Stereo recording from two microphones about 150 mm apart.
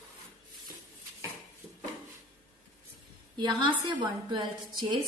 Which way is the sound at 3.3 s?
30° right (ahead or behind).